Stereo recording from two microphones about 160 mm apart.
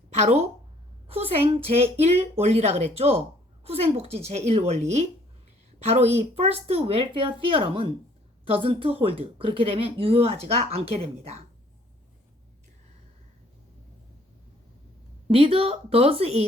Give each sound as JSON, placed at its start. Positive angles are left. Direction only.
{"t": 0.2, "sound": "a woman's voice", "side_deg": -40}
{"t": 15.3, "sound": "a woman's voice", "side_deg": -35}